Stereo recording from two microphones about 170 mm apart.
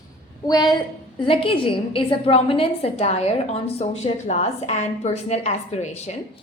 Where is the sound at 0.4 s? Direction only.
25° left (ahead or behind).